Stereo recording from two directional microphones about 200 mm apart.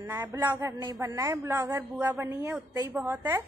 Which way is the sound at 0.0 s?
10° right (ahead or behind).